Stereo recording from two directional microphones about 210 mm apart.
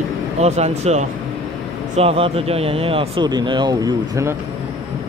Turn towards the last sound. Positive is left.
turn(degrees=-15)  # may be behind; listen again after turning